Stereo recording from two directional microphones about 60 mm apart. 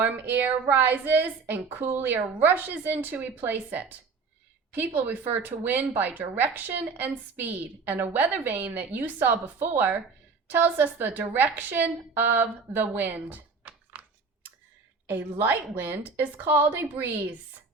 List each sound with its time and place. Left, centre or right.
0.0 s a woman's voice: right
15.0 s a woman's voice: right